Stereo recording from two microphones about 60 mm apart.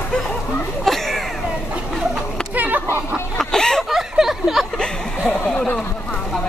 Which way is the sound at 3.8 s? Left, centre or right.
Centre.